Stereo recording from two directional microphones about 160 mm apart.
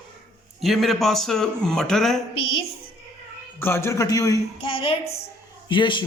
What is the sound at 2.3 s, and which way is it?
Speech, 35° left (ahead or behind).